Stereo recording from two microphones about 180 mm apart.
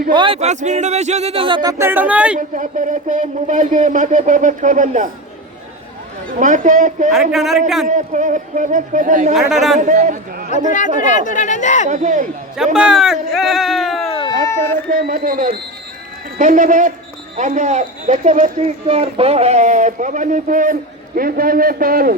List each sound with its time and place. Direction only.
0.1 s speech: 25° right (ahead or behind)
0.3 s speech: 40° right (ahead or behind)
1.8 s speech: 10° right (ahead or behind)
2.6 s speech: 45° right (ahead or behind)
6.4 s speech: 45° right (ahead or behind)
7.1 s speech: centre (ahead or behind)
7.9 s speech: 45° right (ahead or behind)
9.3 s speech: centre (ahead or behind)
9.7 s speech: 45° right (ahead or behind)
10.5 s speech: 45° left (ahead or behind)
11.9 s speech: 45° right (ahead or behind)
12.7 s speech: 5° right (ahead or behind)
14.2 s a sound: 20° left (ahead or behind)
14.9 s speech: 55° right (ahead or behind)